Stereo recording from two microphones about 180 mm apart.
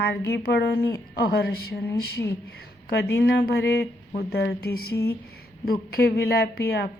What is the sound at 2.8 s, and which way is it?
A woman's voice, 65° left (ahead or behind).